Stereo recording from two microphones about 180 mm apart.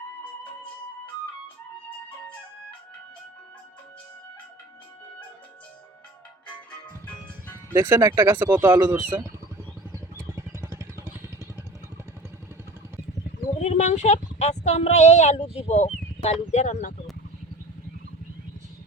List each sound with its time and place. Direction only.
2.0 s flute: 10° left (ahead or behind)
6.7 s music: 10° left (ahead or behind)
7.7 s speech: 15° right (ahead or behind)
9.1 s vehicle: 15° right (ahead or behind)
13.4 s speech: 40° left (ahead or behind)